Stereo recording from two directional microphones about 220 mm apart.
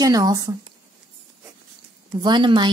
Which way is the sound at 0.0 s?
15° right (ahead or behind).